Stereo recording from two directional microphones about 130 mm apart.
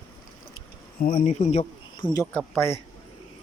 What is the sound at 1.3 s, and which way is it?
Speech, 60° left (ahead or behind).